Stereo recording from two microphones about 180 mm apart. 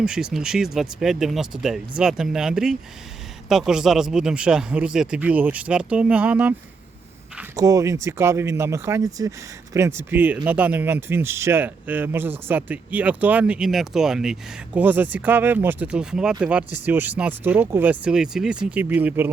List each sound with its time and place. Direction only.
0.0 s speech: 5° right (ahead or behind)
7.5 s speech: 20° right (ahead or behind)